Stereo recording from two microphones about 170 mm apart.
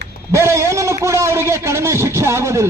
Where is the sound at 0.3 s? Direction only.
15° right (ahead or behind).